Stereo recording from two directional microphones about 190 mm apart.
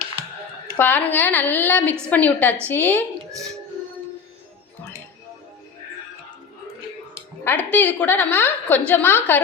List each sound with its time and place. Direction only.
0.8 s a woman's voice: 10° left (ahead or behind)
7.4 s a woman's voice: 10° left (ahead or behind)